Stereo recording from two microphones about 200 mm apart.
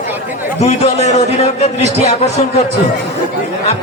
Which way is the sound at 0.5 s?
35° left (ahead or behind).